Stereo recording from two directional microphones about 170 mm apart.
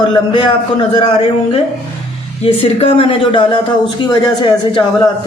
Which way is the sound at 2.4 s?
35° left (ahead or behind).